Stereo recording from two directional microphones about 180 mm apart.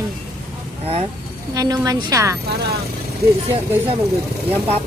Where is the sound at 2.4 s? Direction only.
60° right (ahead or behind).